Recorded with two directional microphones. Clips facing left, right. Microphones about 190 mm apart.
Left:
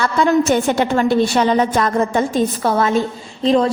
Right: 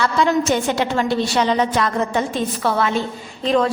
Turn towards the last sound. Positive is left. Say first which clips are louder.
# left 3 dB
turn(degrees=30)  # may be behind; listen again after turning